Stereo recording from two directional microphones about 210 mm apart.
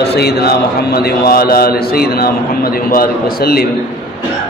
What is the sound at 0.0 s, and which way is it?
A man's voice, 50° left (ahead or behind).